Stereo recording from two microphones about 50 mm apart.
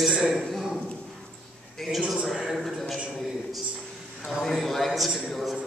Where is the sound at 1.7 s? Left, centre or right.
Centre.